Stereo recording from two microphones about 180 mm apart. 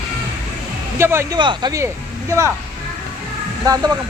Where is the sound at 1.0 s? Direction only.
15° right (ahead or behind).